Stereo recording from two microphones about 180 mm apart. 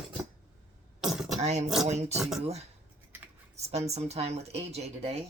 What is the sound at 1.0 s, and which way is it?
Throat clearing, centre (ahead or behind).